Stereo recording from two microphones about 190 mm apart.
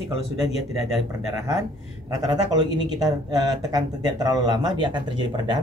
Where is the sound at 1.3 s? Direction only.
20° right (ahead or behind).